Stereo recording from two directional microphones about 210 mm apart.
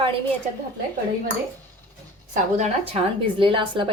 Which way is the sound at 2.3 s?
35° right (ahead or behind).